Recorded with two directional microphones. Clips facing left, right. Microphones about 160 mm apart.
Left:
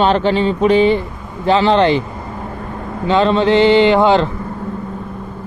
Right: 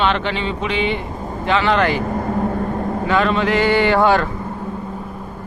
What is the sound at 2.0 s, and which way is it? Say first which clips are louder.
Vehicle: right 8 dB; 50° right (ahead or behind).